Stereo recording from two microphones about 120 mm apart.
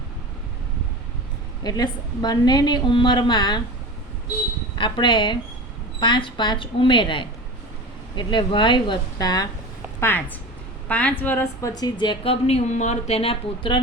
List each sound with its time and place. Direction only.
1.6 s a woman's voice: 35° left (ahead or behind)
4.8 s a woman's voice: 40° left (ahead or behind)
10.0 s speech: 15° left (ahead or behind)
11.6 s speech: 30° left (ahead or behind); by 13.7 s 50° left (ahead or behind)